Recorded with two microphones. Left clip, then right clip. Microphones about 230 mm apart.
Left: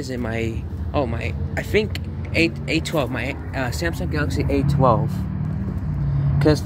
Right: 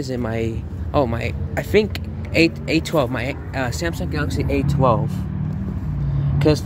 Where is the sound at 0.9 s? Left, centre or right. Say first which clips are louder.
Right 4 dB; right; by 5.0 s centre.